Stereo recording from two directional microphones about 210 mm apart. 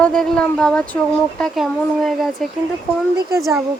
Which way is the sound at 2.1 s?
Centre (ahead or behind).